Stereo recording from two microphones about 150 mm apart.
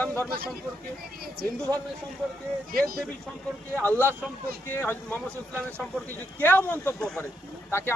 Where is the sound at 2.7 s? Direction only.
75° right (ahead or behind).